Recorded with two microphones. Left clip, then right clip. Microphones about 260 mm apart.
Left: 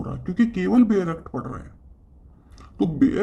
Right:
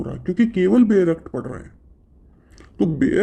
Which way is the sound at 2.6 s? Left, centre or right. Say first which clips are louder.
Right 1 dB; right.